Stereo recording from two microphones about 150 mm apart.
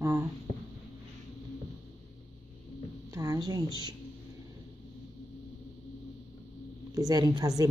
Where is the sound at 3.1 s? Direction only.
20° right (ahead or behind).